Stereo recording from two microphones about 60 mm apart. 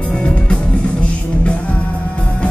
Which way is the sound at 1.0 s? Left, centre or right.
Left.